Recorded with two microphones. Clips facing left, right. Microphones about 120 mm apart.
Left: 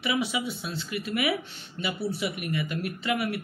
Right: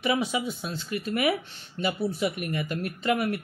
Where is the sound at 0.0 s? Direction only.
40° right (ahead or behind).